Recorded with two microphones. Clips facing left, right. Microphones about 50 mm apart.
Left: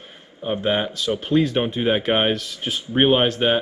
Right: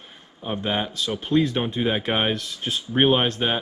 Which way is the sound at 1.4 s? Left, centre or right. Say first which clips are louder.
Even; left.